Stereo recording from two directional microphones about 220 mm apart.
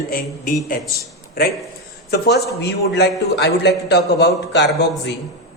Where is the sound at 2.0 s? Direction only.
45° left (ahead or behind).